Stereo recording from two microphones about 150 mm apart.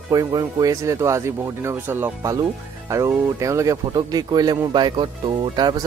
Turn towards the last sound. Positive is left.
turn(degrees=-30)  # may be behind; listen again after turning